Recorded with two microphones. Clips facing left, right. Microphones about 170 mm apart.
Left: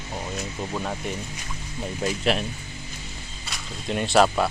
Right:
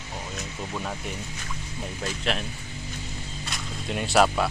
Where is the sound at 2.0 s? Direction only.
10° left (ahead or behind).